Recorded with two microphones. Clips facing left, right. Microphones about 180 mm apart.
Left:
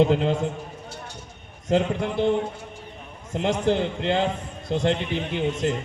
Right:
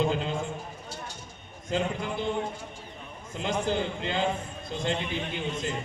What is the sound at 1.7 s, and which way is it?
Speech, 70° left (ahead or behind).